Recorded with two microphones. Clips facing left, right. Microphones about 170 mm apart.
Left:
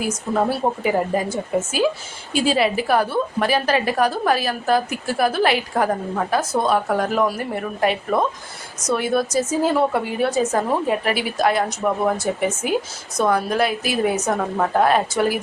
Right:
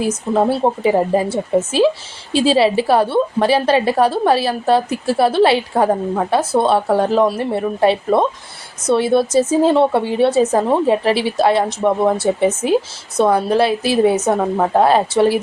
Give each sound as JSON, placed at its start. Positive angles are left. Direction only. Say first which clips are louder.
{"t": 0.0, "sound": "a woman's voice", "louder": "right 5 dB", "side_deg": -25}